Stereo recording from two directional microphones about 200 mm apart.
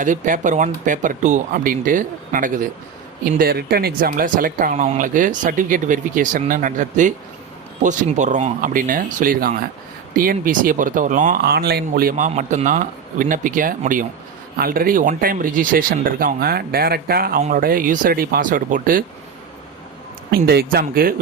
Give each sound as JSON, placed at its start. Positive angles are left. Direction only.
{"t": 0.0, "sound": "speech", "side_deg": -40}
{"t": 20.3, "sound": "speech", "side_deg": -50}